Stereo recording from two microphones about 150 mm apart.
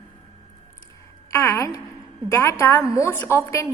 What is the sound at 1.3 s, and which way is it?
A woman's voice, 20° left (ahead or behind).